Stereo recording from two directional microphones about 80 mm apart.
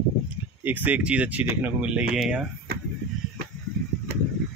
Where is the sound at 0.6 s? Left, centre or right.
Right.